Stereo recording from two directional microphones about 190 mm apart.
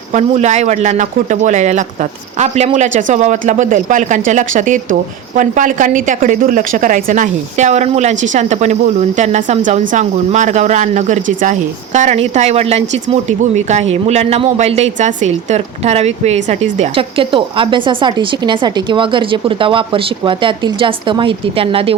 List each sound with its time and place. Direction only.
0.1 s speech: 35° right (ahead or behind)